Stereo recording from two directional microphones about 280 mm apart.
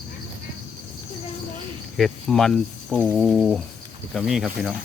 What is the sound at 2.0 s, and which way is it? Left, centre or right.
Speech, centre.